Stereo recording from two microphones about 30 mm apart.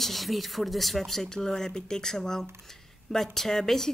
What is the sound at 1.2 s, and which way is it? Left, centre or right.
Speech, left.